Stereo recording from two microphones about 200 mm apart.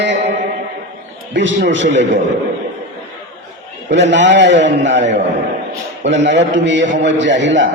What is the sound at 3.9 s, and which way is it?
A man's voice, 65° right (ahead or behind).